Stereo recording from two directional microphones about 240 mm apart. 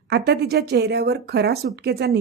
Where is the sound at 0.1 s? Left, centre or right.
Right.